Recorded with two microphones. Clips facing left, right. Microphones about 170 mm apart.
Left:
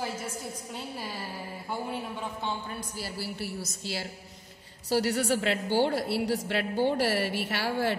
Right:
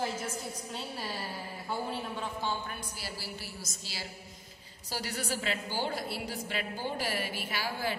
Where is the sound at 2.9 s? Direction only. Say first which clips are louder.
Left 6 dB; 55° left (ahead or behind).